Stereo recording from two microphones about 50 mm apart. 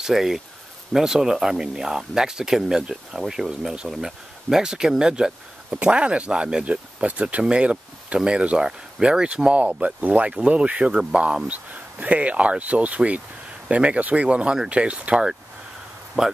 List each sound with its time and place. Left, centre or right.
0.0 s speech: centre
5.7 s speech: right
16.2 s speech: centre